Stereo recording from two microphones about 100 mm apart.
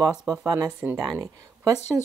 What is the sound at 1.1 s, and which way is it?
Speech, 35° right (ahead or behind).